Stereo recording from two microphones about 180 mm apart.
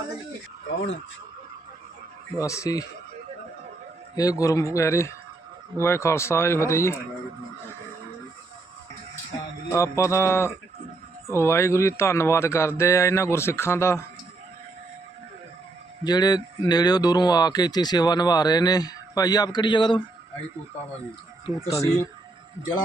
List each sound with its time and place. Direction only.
2.4 s speech: 15° left (ahead or behind)
4.1 s speech: 20° left (ahead or behind)
9.6 s speech: 15° left (ahead or behind)
16.0 s speech: 20° left (ahead or behind)
21.6 s speech: 15° left (ahead or behind)